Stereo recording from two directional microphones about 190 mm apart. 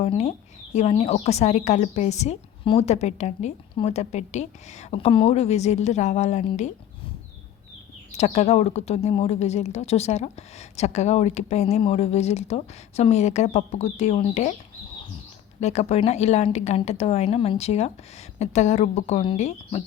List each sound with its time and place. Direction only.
0.0 s speech: 35° left (ahead or behind)
8.1 s speech: 35° left (ahead or behind)
15.6 s speech: 35° left (ahead or behind)